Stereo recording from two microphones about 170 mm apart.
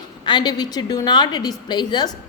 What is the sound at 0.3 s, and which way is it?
A woman's voice, 25° left (ahead or behind).